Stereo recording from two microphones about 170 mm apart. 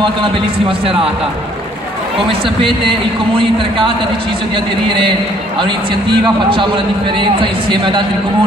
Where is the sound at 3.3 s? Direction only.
30° right (ahead or behind).